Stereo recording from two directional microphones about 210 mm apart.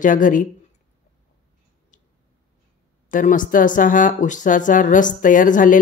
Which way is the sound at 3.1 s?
40° left (ahead or behind).